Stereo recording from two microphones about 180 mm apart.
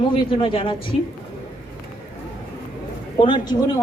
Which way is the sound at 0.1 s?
30° left (ahead or behind).